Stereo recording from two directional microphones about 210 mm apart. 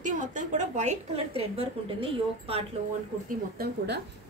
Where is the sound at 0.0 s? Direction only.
35° right (ahead or behind).